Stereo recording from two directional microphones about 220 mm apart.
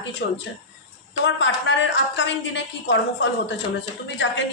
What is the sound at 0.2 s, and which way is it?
A woman's voice, 45° left (ahead or behind).